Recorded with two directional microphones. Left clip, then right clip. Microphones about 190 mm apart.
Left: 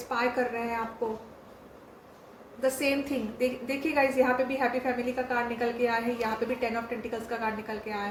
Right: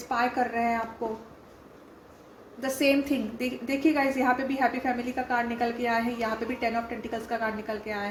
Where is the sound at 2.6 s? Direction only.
35° right (ahead or behind).